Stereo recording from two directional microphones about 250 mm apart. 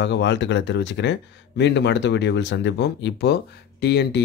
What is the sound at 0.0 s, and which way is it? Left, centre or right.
Speech, left.